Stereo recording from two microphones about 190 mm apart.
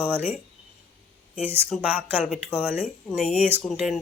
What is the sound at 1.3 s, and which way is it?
A woman's voice, 10° right (ahead or behind).